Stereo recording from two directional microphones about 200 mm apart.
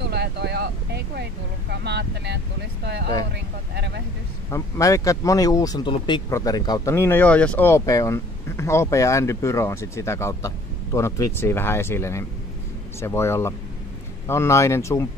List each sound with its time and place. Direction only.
0.0 s speech: 55° right (ahead or behind)
4.5 s speech: 15° left (ahead or behind)